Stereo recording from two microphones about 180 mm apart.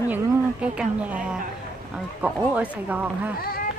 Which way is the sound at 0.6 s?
5° right (ahead or behind).